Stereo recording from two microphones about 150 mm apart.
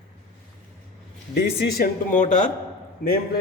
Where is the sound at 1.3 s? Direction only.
90° left.